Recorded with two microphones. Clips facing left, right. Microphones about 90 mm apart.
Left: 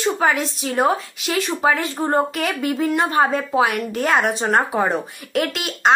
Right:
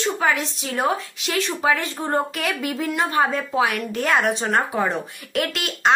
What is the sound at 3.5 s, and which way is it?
A woman's voice, 5° left (ahead or behind).